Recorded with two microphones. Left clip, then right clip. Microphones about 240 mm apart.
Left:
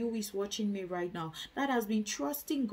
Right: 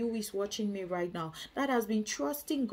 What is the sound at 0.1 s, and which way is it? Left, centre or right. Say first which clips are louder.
Speech: right 1 dB; centre.